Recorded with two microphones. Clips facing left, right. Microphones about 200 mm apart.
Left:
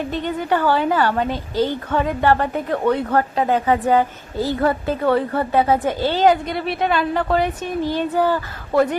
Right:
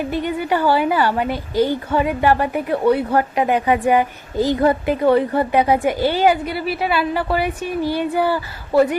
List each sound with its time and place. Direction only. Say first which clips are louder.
0.1 s a woman's voice: right 1 dB; 10° right (ahead or behind)